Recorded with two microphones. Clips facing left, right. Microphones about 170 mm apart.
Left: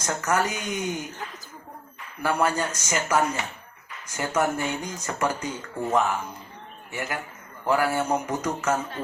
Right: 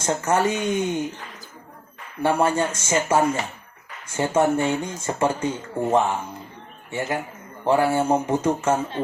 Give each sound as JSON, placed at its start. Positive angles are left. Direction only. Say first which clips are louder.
{"t": 0.0, "sound": "speech", "louder": "right 4 dB", "side_deg": -25}
{"t": 2.2, "sound": "speech", "louder": "right 4 dB", "side_deg": -25}